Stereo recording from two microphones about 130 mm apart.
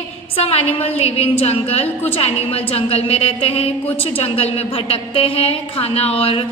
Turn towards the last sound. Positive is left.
turn(degrees=45)  # may be behind; listen again after turning